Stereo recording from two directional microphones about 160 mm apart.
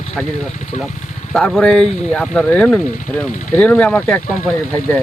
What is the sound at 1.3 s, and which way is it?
Speech, centre (ahead or behind).